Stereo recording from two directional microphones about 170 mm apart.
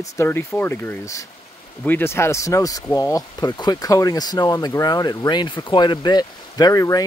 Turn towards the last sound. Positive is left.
turn(degrees=20)  # may be behind; listen again after turning